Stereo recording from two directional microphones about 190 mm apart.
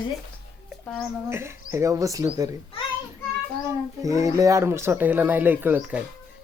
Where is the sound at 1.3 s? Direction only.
15° right (ahead or behind).